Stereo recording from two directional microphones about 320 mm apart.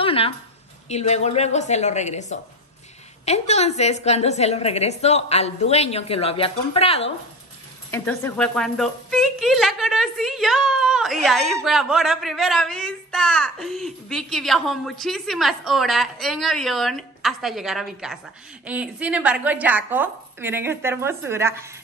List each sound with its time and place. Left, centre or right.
0.0 s a sound: centre
0.8 s a woman's voice: centre
7.9 s a woman's voice: centre